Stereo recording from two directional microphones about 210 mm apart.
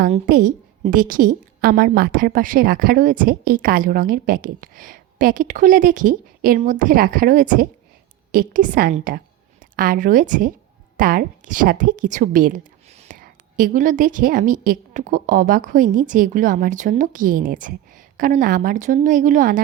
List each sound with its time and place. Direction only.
0.1 s a woman's voice: 40° right (ahead or behind)